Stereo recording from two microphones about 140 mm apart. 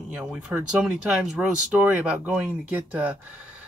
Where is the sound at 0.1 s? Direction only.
10° right (ahead or behind).